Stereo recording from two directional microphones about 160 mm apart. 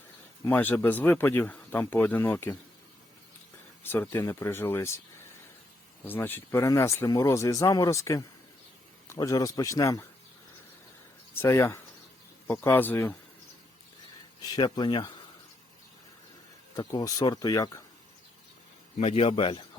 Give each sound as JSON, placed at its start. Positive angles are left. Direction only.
{"t": 0.4, "sound": "speech", "side_deg": 10}
{"t": 3.8, "sound": "speech", "side_deg": 15}
{"t": 6.1, "sound": "speech", "side_deg": 15}
{"t": 11.3, "sound": "speech", "side_deg": 15}
{"t": 14.4, "sound": "speech", "side_deg": 25}
{"t": 16.7, "sound": "speech", "side_deg": 20}
{"t": 18.9, "sound": "a man's voice", "side_deg": 35}